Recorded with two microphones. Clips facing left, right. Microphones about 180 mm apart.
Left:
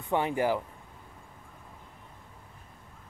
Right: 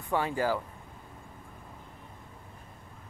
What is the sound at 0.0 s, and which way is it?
Speech, 20° left (ahead or behind).